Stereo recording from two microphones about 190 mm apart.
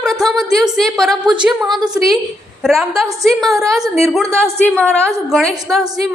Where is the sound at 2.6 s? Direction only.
Centre (ahead or behind).